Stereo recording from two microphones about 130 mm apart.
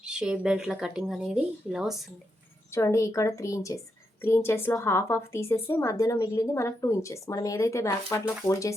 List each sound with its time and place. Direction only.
0.0 s speech: 5° right (ahead or behind)
2.7 s a woman's voice: 25° left (ahead or behind)